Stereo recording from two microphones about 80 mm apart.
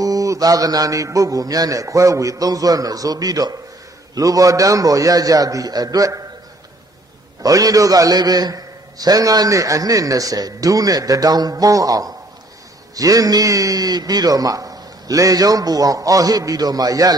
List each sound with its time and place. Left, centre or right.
0.0 s a man's voice: right
7.4 s a man's voice: right